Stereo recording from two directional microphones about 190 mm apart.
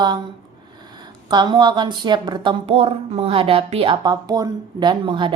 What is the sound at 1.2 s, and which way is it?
Speech, 25° right (ahead or behind).